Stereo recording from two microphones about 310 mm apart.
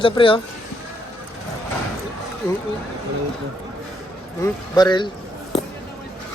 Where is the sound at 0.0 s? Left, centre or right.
Centre.